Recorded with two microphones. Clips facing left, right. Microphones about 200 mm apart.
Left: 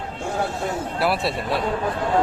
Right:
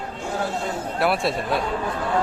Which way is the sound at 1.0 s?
Centre (ahead or behind).